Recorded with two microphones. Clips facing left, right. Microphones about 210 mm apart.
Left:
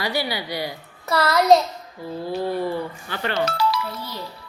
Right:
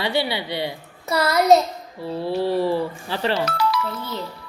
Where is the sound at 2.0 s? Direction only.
75° right (ahead or behind); by 3.0 s 90° right.